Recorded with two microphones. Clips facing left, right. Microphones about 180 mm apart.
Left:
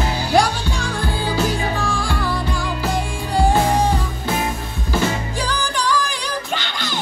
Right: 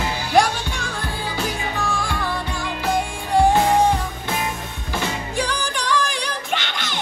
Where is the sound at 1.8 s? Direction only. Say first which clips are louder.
Left 2 dB; 30° left (ahead or behind).